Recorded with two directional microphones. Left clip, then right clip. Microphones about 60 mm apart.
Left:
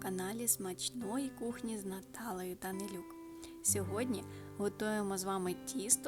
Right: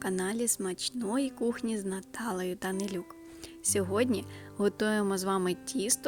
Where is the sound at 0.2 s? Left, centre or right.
Right.